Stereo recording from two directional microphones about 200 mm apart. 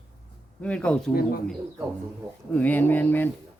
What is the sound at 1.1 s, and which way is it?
Speech, 50° left (ahead or behind).